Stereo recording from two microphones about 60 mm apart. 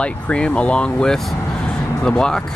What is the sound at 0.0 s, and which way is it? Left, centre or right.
Speech, centre.